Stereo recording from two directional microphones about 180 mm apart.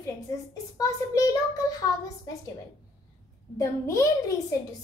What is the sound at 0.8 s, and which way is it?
Speech, 20° left (ahead or behind).